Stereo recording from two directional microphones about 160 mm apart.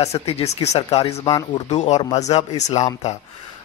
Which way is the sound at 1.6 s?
45° left (ahead or behind).